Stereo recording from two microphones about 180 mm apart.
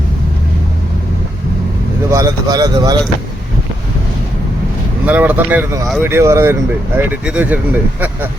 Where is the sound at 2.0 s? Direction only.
20° right (ahead or behind).